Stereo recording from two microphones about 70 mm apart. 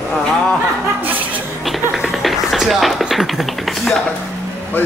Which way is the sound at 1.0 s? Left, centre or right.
Right.